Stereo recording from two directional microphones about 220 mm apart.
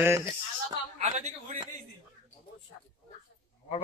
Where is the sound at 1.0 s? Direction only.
30° right (ahead or behind).